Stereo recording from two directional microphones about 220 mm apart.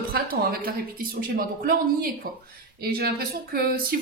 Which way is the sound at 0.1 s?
45° right (ahead or behind).